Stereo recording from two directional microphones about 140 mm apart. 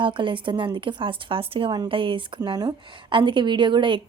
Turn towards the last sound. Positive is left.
turn(degrees=-35)  # may be behind; listen again after turning